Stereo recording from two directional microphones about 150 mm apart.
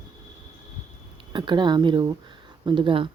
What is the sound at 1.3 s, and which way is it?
Speech, 30° right (ahead or behind).